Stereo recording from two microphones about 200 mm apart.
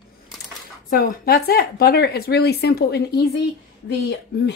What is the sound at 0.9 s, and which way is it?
Speech, 45° left (ahead or behind).